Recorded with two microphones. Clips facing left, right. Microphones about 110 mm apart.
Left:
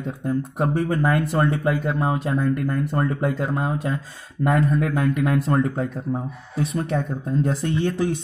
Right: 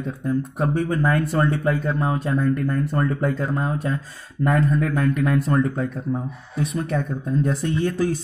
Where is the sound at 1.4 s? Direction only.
30° left (ahead or behind).